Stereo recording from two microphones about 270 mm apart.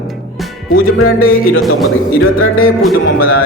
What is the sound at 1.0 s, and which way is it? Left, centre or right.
Music, left.